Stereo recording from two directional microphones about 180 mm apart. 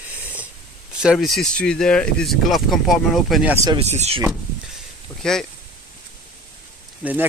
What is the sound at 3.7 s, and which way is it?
Speech, 35° right (ahead or behind).